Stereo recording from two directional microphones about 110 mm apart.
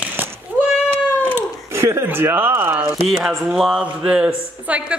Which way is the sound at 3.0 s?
5° right (ahead or behind).